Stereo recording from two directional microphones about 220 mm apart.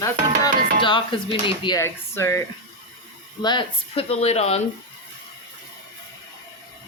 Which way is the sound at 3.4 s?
25° left (ahead or behind).